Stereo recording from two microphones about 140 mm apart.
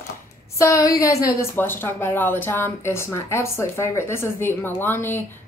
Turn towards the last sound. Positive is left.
turn(degrees=15)  # may be behind; listen again after turning